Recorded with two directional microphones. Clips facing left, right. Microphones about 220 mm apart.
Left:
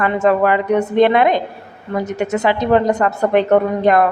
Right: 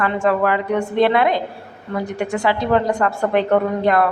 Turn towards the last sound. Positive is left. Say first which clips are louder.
# left 3 dB
turn(degrees=20)  # may be behind; listen again after turning